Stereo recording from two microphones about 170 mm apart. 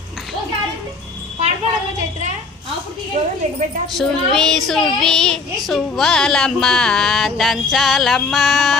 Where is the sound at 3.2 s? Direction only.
40° right (ahead or behind).